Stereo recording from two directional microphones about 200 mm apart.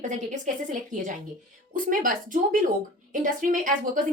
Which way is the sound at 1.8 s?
40° right (ahead or behind).